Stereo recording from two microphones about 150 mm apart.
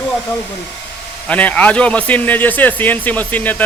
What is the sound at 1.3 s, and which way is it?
Speech, 10° left (ahead or behind).